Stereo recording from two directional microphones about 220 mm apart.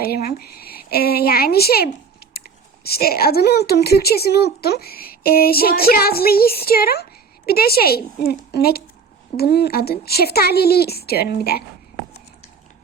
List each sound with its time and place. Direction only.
0.0 s a woman's voice: 45° left (ahead or behind)
2.2 s biting: 45° left (ahead or behind)
2.8 s speech: 45° left (ahead or behind)